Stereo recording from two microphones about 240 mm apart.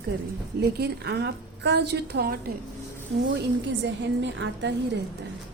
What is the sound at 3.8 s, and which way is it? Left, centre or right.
Speech, right.